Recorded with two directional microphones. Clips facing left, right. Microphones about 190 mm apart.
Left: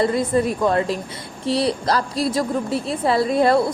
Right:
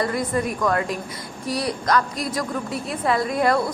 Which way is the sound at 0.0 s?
25° left (ahead or behind).